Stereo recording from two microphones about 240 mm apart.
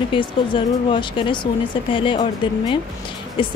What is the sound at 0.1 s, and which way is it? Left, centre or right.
Speech, left.